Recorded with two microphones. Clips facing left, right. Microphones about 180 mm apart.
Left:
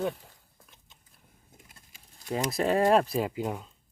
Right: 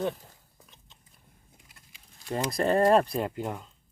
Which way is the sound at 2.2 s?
Centre (ahead or behind).